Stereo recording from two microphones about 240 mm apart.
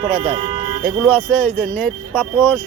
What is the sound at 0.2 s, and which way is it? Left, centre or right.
Speech, centre.